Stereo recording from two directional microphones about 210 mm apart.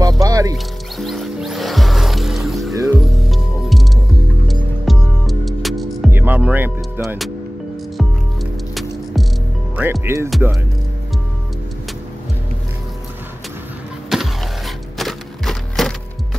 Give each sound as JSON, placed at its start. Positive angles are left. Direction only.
{"t": 0.2, "sound": "music", "side_deg": -15}
{"t": 0.9, "sound": "music", "side_deg": 0}
{"t": 4.8, "sound": "music", "side_deg": 0}
{"t": 9.8, "sound": "speech", "side_deg": -10}
{"t": 14.1, "sound": "a sound", "side_deg": 0}